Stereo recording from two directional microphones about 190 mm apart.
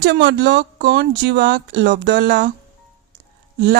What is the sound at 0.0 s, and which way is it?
Speech, 65° right (ahead or behind).